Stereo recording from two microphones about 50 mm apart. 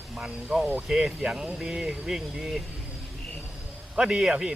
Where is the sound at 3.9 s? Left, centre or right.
Centre.